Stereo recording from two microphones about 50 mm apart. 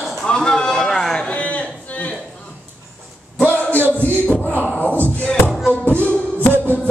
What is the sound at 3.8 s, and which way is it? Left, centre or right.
Music, right.